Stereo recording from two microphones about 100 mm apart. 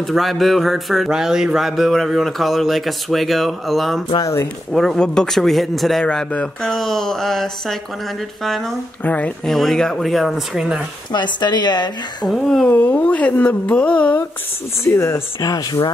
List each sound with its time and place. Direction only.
0.0 s speech: centre (ahead or behind)
4.2 s speech: 25° left (ahead or behind)
4.7 s speech: 5° left (ahead or behind)
9.0 s speech: 15° left (ahead or behind)
9.5 s speech: centre (ahead or behind)
11.1 s a woman's voice: 50° left (ahead or behind)
12.3 s speech: 5° left (ahead or behind)
12.6 s speech: 15° left (ahead or behind)
14.9 s speech: 25° left (ahead or behind)
15.5 s speech: 40° left (ahead or behind)